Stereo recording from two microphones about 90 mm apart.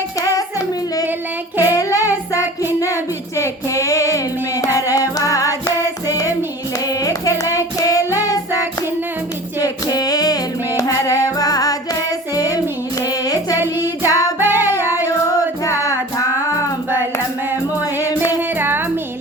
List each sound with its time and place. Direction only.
0.2 s music: 40° left (ahead or behind)
1.6 s child singing: 40° left (ahead or behind)
4.8 s music: 40° left (ahead or behind)
6.8 s child singing: 40° left (ahead or behind)
9.6 s music: 45° left (ahead or behind)
13.6 s child singing: 25° right (ahead or behind)
14.1 s music: 40° left (ahead or behind)
14.3 s music: 20° right (ahead or behind)
15.3 s music: 40° left (ahead or behind)
17.5 s music: 25° right (ahead or behind)